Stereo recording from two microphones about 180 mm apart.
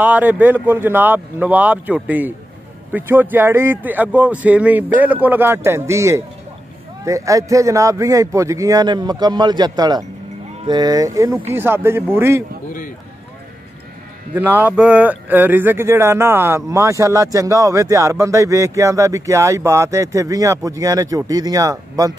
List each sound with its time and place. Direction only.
0.0 s speech: 10° right (ahead or behind)
14.3 s speech: 10° right (ahead or behind)